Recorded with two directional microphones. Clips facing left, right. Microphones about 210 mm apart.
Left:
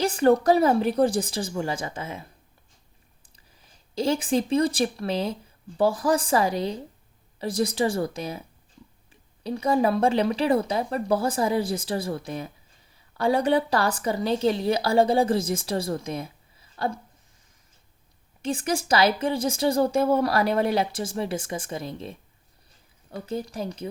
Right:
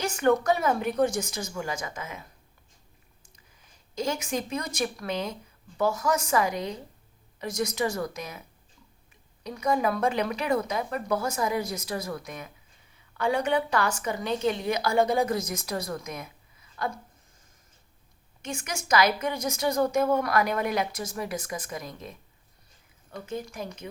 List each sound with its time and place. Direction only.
0.0 s a woman's voice: 35° left (ahead or behind)
3.3 s a woman's voice: 30° left (ahead or behind)
18.4 s a woman's voice: 30° left (ahead or behind)
23.2 s a woman's voice: 35° left (ahead or behind)